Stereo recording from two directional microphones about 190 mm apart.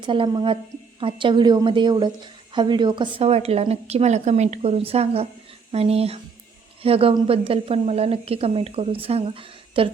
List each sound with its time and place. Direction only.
0.0 s a woman's voice: 25° right (ahead or behind)